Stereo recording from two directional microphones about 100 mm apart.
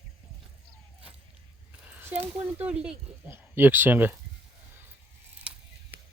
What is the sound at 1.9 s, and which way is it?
Speech, 20° right (ahead or behind).